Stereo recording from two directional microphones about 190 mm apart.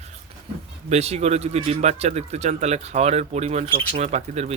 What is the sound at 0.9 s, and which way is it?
Speech, 35° right (ahead or behind).